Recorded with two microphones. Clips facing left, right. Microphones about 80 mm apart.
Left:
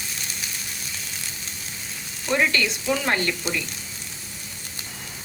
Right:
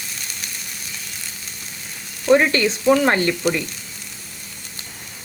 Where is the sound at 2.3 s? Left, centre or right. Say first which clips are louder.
Right 7 dB; right.